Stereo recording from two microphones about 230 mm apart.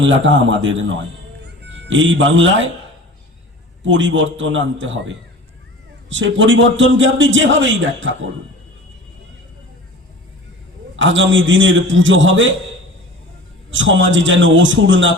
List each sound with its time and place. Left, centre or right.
0.0 s a man's voice: right
1.4 s music: right
3.8 s a man's voice: right
10.9 s a man's voice: right
13.7 s a man's voice: right